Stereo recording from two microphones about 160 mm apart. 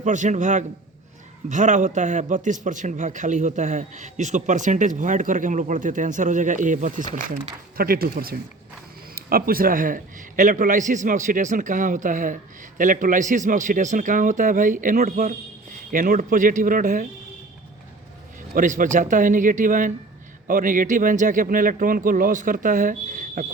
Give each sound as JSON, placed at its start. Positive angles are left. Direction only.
{"t": 0.0, "sound": "a man's voice", "side_deg": -50}
{"t": 7.8, "sound": "a man's voice", "side_deg": -70}
{"t": 18.5, "sound": "speech", "side_deg": -55}